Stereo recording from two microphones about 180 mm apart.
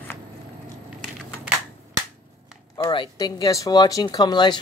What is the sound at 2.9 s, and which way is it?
Speech, 25° left (ahead or behind).